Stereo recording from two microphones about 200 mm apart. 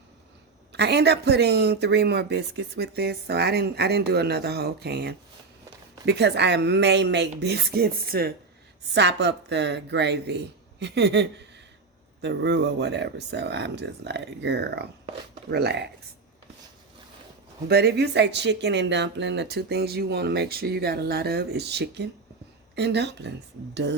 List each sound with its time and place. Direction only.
0.7 s speech: 55° right (ahead or behind)
17.7 s speech: 55° right (ahead or behind)